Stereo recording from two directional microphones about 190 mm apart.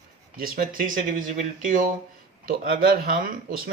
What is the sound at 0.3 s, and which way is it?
Speech, 50° right (ahead or behind).